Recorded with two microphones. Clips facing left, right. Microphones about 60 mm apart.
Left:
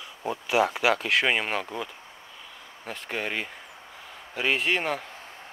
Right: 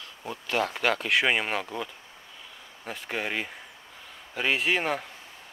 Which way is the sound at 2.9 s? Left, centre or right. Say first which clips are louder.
Even; centre.